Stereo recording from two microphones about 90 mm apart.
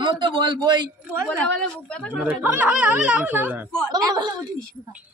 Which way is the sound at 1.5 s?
15° left (ahead or behind).